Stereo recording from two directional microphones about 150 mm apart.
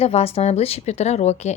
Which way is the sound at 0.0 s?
40° left (ahead or behind).